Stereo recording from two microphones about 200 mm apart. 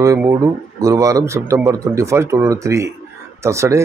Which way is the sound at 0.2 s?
15° right (ahead or behind).